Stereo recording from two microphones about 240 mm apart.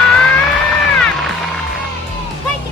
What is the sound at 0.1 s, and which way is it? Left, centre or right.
Music, centre.